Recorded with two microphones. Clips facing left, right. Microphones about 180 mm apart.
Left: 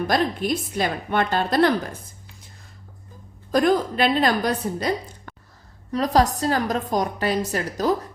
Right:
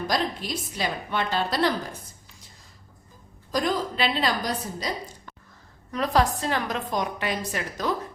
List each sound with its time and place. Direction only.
0.1 s a woman's voice: 55° left (ahead or behind)
3.5 s a woman's voice: 55° left (ahead or behind)
5.9 s a woman's voice: 35° left (ahead or behind)